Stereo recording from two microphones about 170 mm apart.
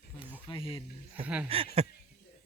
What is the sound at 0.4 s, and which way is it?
Speech, 30° left (ahead or behind).